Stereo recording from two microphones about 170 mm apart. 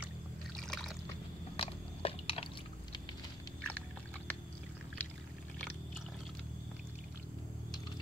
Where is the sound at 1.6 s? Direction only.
35° left (ahead or behind).